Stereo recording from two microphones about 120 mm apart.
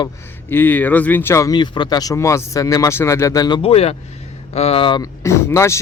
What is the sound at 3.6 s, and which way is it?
Speech, 55° left (ahead or behind).